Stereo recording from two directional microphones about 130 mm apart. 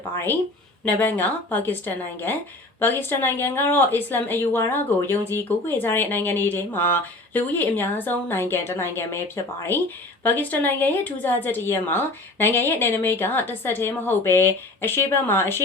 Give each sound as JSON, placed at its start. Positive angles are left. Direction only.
{"t": 0.9, "sound": "a woman's voice", "side_deg": 15}